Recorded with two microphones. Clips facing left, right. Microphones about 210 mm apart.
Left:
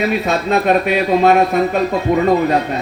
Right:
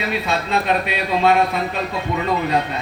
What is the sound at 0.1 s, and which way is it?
A man's voice, 50° left (ahead or behind).